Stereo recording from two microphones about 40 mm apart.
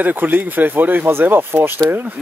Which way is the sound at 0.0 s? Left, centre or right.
Right.